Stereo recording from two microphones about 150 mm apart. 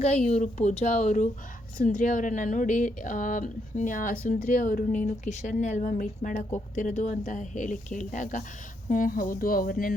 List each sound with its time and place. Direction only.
0.0 s speech: 45° left (ahead or behind); by 9.9 s 70° left (ahead or behind)